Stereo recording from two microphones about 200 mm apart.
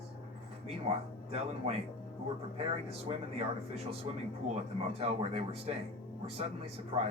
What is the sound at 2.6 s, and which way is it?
Speech, 30° right (ahead or behind).